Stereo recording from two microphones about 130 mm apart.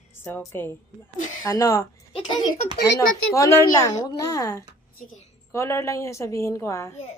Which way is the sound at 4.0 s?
30° left (ahead or behind).